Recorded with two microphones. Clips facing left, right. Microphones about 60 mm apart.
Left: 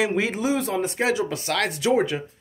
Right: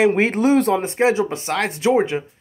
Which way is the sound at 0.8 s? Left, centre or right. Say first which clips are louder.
Right 5 dB; right.